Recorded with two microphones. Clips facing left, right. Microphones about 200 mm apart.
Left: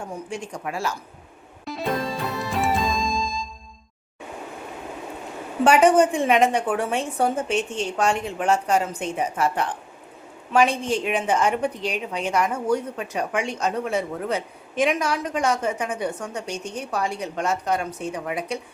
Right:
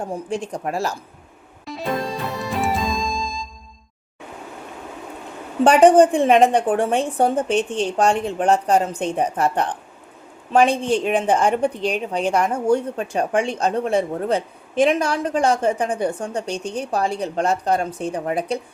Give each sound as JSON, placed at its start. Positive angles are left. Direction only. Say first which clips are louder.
{"t": 0.0, "sound": "a woman's voice", "louder": "right 6 dB", "side_deg": -35}
{"t": 1.6, "sound": "music", "louder": "right 1 dB", "side_deg": 0}
{"t": 5.6, "sound": "a woman's voice", "louder": "right 4 dB", "side_deg": -35}